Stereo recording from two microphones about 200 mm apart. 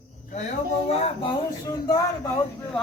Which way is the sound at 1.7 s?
20° left (ahead or behind).